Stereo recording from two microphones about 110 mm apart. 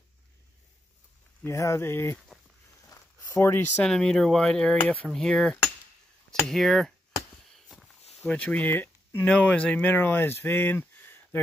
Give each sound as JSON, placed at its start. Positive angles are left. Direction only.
{"t": 1.4, "sound": "speech", "side_deg": 30}
{"t": 2.9, "sound": "a sound", "side_deg": 25}
{"t": 3.8, "sound": "speech", "side_deg": 5}
{"t": 7.5, "sound": "walk", "side_deg": 5}
{"t": 8.3, "sound": "speech", "side_deg": 10}